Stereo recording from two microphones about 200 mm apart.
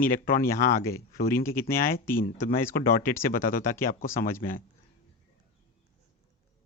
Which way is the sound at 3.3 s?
45° left (ahead or behind).